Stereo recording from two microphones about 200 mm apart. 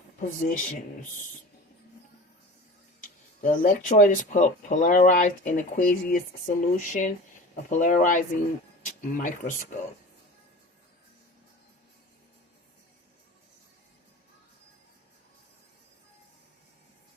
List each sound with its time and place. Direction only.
0.2 s speech: 40° left (ahead or behind)
3.4 s speech: 40° left (ahead or behind)